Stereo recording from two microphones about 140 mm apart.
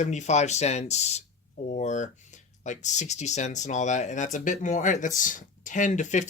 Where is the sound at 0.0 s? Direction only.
55° left (ahead or behind).